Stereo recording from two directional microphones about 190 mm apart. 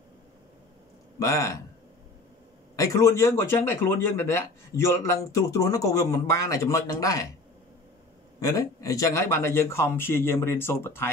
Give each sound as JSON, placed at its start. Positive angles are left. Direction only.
{"t": 1.2, "sound": "speech", "side_deg": 15}
{"t": 2.7, "sound": "speech", "side_deg": 15}
{"t": 8.4, "sound": "speech", "side_deg": 20}